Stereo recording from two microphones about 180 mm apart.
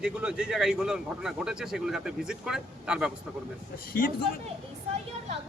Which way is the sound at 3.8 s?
55° left (ahead or behind).